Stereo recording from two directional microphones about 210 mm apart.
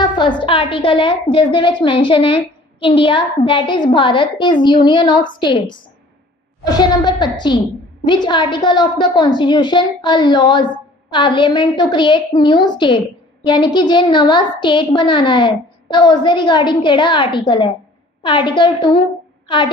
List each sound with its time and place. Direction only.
0.0 s a woman's voice: 20° left (ahead or behind)